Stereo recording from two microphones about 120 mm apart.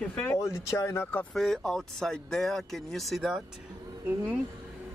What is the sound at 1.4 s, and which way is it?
Speech, 5° left (ahead or behind).